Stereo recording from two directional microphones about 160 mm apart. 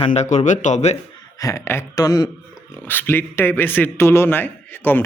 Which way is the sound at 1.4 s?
15° left (ahead or behind).